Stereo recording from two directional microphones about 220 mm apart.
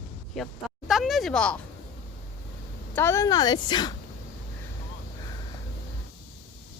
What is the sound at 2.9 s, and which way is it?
A woman's voice, 10° left (ahead or behind).